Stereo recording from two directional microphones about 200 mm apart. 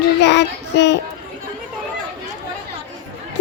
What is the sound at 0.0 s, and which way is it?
Child singing, 60° left (ahead or behind).